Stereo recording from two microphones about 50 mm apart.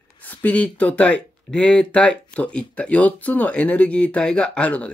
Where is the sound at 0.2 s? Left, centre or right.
Left.